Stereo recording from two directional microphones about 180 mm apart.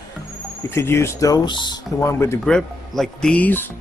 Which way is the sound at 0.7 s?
15° left (ahead or behind).